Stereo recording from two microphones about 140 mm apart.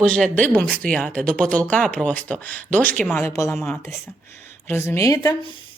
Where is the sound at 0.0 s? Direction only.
5° left (ahead or behind).